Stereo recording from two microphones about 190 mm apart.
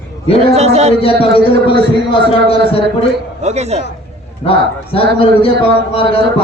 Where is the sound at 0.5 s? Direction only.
35° right (ahead or behind).